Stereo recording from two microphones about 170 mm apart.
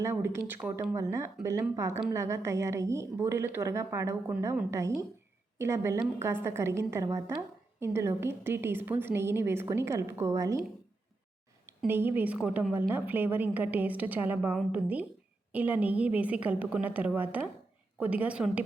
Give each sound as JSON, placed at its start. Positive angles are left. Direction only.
{"t": 0.0, "sound": "a woman's voice", "side_deg": -15}
{"t": 11.9, "sound": "a woman's voice", "side_deg": -10}